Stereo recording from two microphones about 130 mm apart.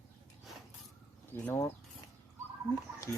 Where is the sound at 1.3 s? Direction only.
20° left (ahead or behind).